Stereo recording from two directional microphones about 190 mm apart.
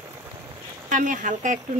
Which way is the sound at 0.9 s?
40° right (ahead or behind).